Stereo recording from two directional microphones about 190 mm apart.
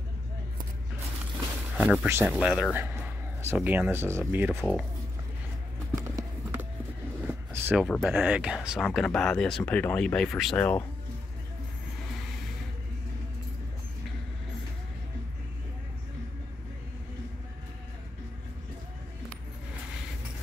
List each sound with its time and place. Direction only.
1.8 s speech: 10° right (ahead or behind)
5.9 s clip-clop: 20° right (ahead or behind)
7.5 s a sound: 10° right (ahead or behind)
7.8 s speech: centre (ahead or behind)